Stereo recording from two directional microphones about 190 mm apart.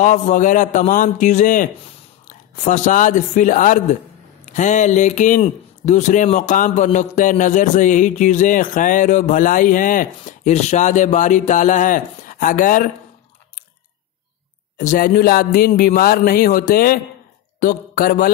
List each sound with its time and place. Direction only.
0.0 s speech: 40° left (ahead or behind)
14.8 s a sound: 45° left (ahead or behind)
17.6 s speech: 50° left (ahead or behind)